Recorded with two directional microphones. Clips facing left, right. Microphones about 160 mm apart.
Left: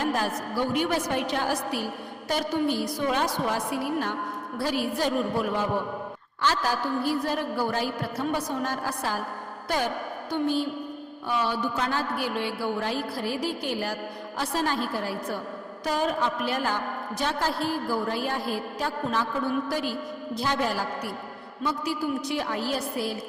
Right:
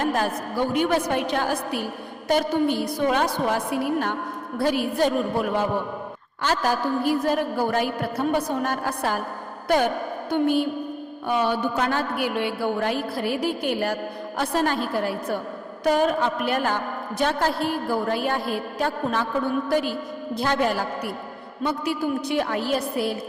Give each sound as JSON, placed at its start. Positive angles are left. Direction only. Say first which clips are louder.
{"t": 0.0, "sound": "a woman's voice", "louder": "right 3 dB", "side_deg": -55}
{"t": 6.4, "sound": "a woman's voice", "louder": "right 3 dB", "side_deg": -50}